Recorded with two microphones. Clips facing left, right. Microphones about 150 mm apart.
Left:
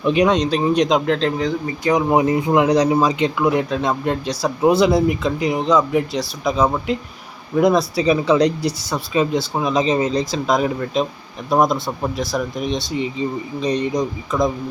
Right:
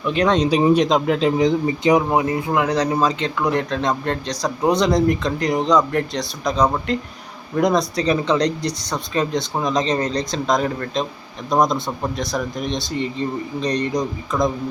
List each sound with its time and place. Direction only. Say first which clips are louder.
0.0 s speech: left 4 dB; 15° left (ahead or behind)
0.4 s speech: right 2 dB; 10° right (ahead or behind)
1.4 s speech: right 4 dB; 20° right (ahead or behind)
2.0 s speech: left 3 dB; 20° left (ahead or behind); by 14.5 s centre (ahead or behind)